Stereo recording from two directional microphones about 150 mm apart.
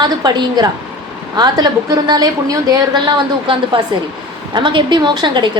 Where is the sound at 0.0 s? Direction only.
30° right (ahead or behind).